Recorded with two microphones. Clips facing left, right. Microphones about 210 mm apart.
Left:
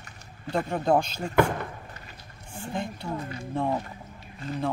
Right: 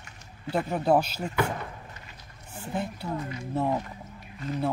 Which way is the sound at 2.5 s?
5° right (ahead or behind).